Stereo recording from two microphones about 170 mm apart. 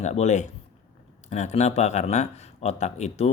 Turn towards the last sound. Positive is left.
turn(degrees=40)  # may be behind; listen again after turning